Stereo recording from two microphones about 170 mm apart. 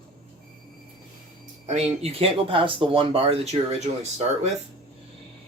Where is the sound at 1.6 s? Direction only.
40° right (ahead or behind).